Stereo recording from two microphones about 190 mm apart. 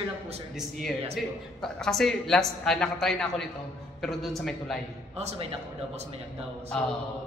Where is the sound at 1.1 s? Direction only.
Centre (ahead or behind).